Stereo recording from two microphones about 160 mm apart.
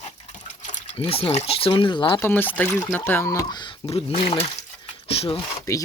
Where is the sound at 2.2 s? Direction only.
10° left (ahead or behind); by 5.4 s 35° left (ahead or behind).